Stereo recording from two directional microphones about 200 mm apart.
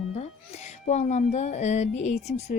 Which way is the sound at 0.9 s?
35° left (ahead or behind).